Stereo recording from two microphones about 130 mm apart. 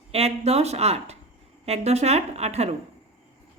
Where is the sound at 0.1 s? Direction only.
55° right (ahead or behind).